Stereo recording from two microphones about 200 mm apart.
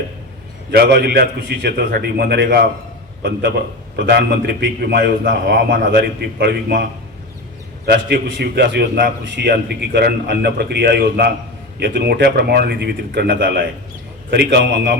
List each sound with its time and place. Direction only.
0.8 s a man's voice: 55° right (ahead or behind)
7.9 s a man's voice: 50° right (ahead or behind)